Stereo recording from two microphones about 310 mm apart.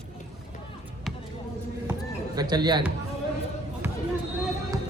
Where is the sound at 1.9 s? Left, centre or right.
Centre.